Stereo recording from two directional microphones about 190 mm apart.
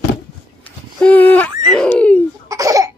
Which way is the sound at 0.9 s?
5° left (ahead or behind).